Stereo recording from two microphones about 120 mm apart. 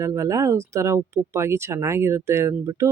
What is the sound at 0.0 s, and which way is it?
Speech, 25° right (ahead or behind).